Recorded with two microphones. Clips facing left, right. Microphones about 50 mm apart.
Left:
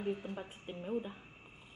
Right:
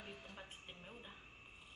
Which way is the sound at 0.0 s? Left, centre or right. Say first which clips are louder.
Left 14 dB; left.